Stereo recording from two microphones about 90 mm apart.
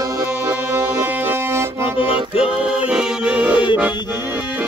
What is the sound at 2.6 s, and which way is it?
Music, 10° right (ahead or behind).